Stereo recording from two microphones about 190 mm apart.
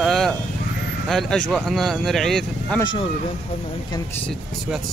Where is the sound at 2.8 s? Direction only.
25° left (ahead or behind).